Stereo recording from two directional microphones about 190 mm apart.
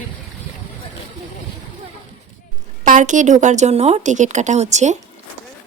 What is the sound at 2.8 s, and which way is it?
Speech, 45° right (ahead or behind).